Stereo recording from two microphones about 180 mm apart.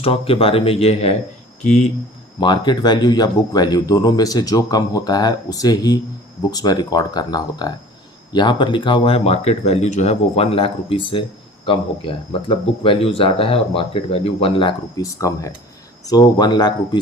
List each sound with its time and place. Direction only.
0.0 s speech: 30° left (ahead or behind)
2.4 s speech: 25° left (ahead or behind)
15.2 s speech: 20° left (ahead or behind)